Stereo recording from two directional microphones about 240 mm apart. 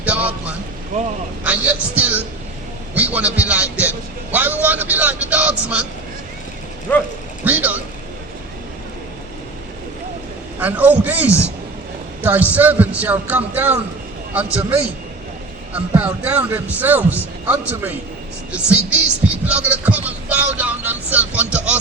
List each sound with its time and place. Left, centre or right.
0.0 s a sound: centre
1.5 s a man's voice: centre
6.9 s a man's voice: centre
7.4 s a man's voice: centre
10.6 s a man's voice: centre
11.3 s a man's voice: centre
12.2 s a man's voice: centre
15.7 s a man's voice: centre